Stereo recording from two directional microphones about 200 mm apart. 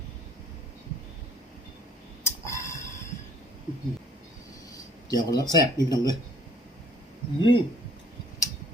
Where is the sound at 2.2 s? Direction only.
15° left (ahead or behind).